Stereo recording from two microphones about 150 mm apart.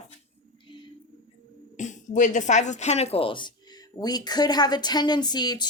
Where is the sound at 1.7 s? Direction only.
55° left (ahead or behind).